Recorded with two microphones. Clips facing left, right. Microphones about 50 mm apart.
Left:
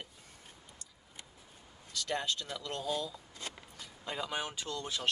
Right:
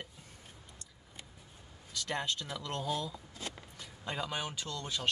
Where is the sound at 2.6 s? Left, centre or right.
Right.